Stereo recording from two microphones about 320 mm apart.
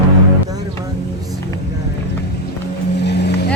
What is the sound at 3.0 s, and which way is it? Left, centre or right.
Vehicle, left.